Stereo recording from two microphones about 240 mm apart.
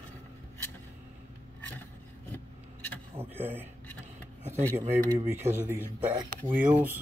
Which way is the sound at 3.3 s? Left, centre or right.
Centre.